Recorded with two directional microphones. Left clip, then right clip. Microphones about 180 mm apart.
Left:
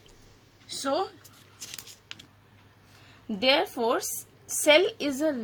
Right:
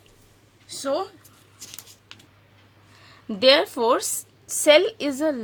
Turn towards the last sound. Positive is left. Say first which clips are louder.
# right 3 dB
turn(degrees=-30)  # may be behind; listen again after turning